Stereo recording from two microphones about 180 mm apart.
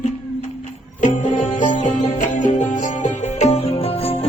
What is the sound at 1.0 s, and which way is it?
Music, 40° left (ahead or behind).